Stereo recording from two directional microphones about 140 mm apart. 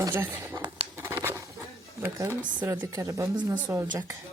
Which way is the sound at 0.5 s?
30° right (ahead or behind).